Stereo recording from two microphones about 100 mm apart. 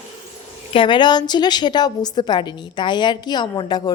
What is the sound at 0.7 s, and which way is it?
A woman's voice, 50° left (ahead or behind).